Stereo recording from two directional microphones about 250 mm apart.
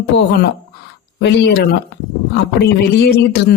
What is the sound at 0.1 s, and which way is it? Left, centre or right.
Speech, left.